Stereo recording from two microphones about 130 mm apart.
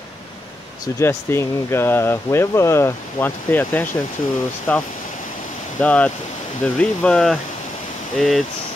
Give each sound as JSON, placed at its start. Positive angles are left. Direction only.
{"t": 0.9, "sound": "speech", "side_deg": 20}